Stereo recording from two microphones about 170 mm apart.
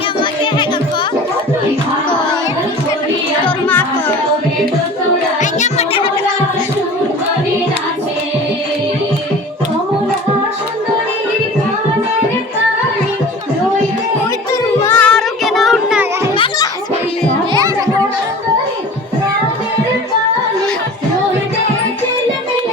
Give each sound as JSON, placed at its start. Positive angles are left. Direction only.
{"t": 3.4, "sound": "music", "side_deg": 10}
{"t": 5.4, "sound": "music", "side_deg": 45}
{"t": 14.8, "sound": "music", "side_deg": 10}
{"t": 17.5, "sound": "children playing", "side_deg": -20}